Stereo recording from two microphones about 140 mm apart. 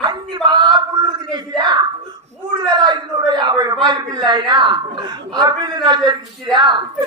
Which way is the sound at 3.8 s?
30° right (ahead or behind).